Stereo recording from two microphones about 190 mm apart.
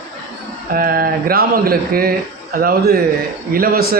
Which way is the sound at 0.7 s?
50° right (ahead or behind).